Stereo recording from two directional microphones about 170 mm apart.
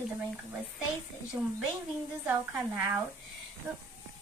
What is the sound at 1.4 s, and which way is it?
A woman's voice, 5° right (ahead or behind).